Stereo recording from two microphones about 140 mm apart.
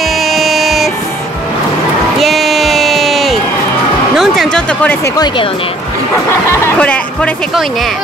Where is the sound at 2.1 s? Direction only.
Centre (ahead or behind).